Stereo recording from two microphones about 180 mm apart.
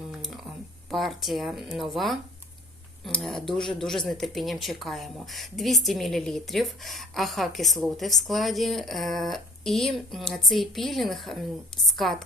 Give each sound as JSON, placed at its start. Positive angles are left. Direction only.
{"t": 0.9, "sound": "speech", "side_deg": 0}